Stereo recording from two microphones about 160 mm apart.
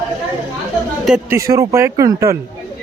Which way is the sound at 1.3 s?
20° right (ahead or behind).